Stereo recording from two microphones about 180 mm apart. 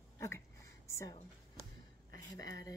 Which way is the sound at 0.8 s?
15° left (ahead or behind).